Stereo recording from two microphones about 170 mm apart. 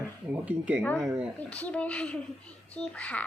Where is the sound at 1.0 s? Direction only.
15° right (ahead or behind).